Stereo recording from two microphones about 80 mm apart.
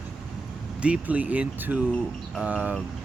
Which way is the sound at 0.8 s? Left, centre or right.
Centre.